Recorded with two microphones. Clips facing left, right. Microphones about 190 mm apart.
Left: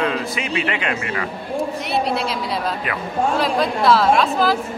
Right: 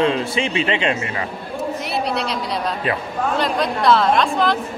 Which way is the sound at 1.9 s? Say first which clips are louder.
Left 3 dB; centre (ahead or behind).